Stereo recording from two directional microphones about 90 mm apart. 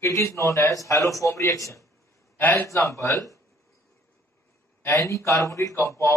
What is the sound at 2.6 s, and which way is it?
Speech, 35° left (ahead or behind).